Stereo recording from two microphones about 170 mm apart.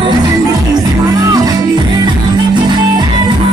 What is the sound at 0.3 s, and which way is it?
Music, 20° right (ahead or behind).